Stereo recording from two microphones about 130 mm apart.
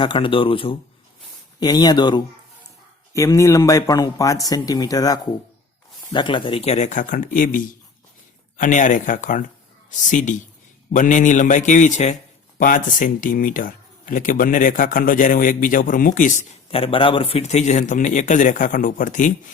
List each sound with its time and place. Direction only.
0.0 s speech: 40° left (ahead or behind)
1.5 s speech: 30° left (ahead or behind)
3.1 s speech: 25° left (ahead or behind)
6.1 s speech: 40° left (ahead or behind); by 12.1 s 65° left (ahead or behind)
12.5 s speech: 90° left
16.6 s speech: 45° left (ahead or behind); by 19.3 s 80° left